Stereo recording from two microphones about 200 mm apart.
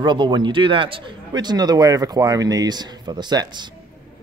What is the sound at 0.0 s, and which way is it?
Speech, 20° right (ahead or behind).